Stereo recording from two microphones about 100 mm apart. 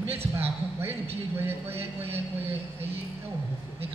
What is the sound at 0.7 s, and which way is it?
Speech, 25° right (ahead or behind).